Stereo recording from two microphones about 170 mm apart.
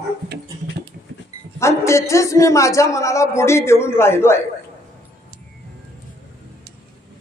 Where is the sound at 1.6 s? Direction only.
15° left (ahead or behind).